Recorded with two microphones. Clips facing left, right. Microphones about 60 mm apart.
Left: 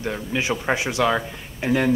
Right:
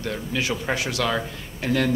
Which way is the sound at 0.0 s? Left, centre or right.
Left.